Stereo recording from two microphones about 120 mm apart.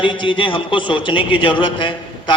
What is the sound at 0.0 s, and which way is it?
A man's voice, 45° left (ahead or behind).